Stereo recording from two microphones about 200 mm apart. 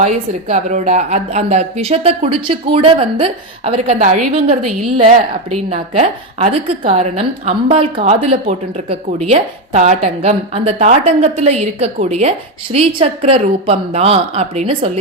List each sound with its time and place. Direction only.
0.0 s a woman's voice: 35° right (ahead or behind)